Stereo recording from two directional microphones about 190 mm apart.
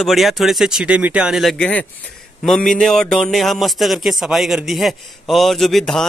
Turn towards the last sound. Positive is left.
turn(degrees=0)  # may be behind; listen again after turning